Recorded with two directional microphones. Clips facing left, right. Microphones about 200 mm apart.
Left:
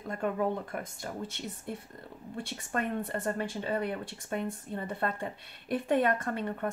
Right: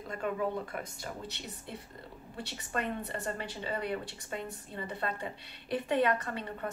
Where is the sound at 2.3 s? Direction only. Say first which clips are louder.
Left 2 dB; 50° left (ahead or behind).